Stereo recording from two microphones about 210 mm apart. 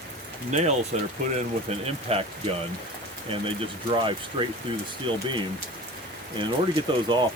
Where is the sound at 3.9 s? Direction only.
25° right (ahead or behind).